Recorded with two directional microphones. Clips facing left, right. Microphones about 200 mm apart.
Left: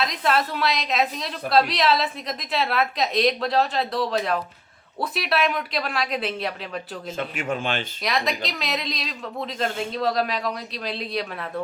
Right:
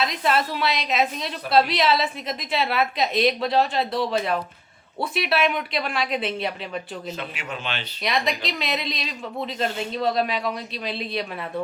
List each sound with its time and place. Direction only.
0.0 s a woman's voice: centre (ahead or behind)
7.2 s a man's voice: 45° left (ahead or behind)
8.0 s a woman's voice: centre (ahead or behind)